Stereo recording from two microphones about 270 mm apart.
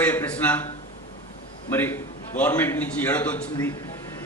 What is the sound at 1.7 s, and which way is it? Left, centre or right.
A man's voice, centre.